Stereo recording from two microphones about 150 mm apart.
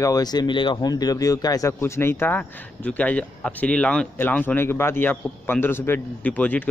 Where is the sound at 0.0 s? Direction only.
25° left (ahead or behind).